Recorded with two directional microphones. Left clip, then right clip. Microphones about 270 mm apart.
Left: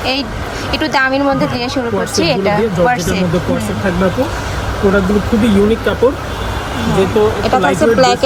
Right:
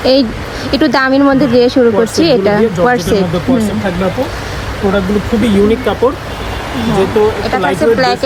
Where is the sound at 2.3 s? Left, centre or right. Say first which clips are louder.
Right 2 dB; right.